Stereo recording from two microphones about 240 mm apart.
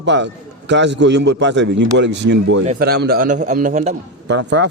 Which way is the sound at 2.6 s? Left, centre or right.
Right.